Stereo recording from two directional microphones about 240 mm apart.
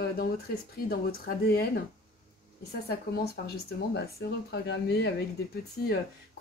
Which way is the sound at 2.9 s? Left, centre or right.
Left.